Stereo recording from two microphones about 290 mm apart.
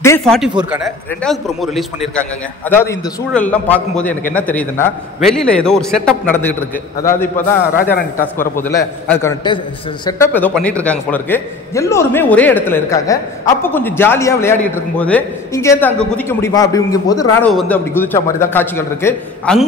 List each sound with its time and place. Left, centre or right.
0.0 s a man's voice: centre
7.3 s a man's voice: left
8.4 s a man's voice: centre